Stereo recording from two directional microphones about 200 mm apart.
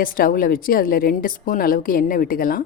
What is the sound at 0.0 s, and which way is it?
Speech, 45° left (ahead or behind).